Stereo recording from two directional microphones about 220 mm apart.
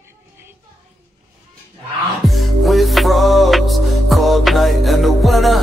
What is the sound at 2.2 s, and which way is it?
Music, centre (ahead or behind).